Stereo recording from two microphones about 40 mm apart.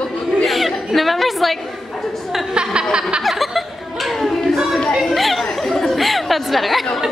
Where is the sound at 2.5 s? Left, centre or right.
Right.